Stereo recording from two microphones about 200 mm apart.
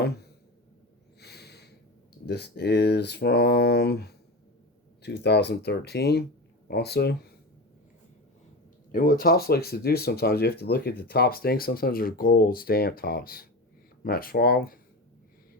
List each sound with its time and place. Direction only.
1.2 s snort: 55° left (ahead or behind)
2.2 s speech: 55° left (ahead or behind)
8.9 s speech: 45° left (ahead or behind)